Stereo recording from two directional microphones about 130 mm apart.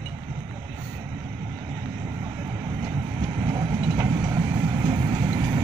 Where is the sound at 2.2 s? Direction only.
30° right (ahead or behind).